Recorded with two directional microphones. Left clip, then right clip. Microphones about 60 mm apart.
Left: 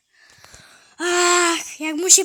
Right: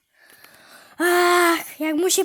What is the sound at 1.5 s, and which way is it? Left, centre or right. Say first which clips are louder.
Speech: right 2 dB; right.